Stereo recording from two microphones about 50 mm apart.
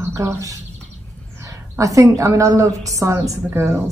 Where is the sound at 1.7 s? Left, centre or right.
Right.